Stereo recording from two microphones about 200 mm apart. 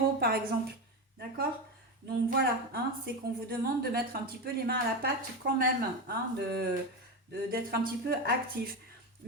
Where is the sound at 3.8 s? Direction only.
50° right (ahead or behind).